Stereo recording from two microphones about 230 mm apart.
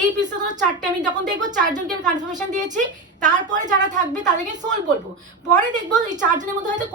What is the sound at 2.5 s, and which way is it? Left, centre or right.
A woman's voice, right.